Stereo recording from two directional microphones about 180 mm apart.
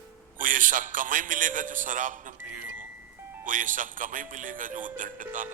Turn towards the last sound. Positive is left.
turn(degrees=-45)  # may be behind; listen again after turning